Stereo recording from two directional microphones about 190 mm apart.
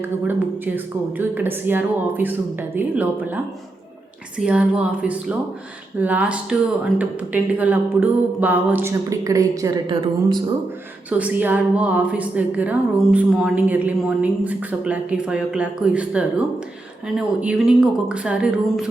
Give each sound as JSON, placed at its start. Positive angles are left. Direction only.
{"t": 0.0, "sound": "a woman's voice", "side_deg": -10}
{"t": 11.1, "sound": "a woman's voice", "side_deg": -10}